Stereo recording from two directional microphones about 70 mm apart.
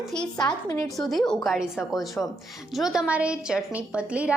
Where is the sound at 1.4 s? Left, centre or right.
Centre.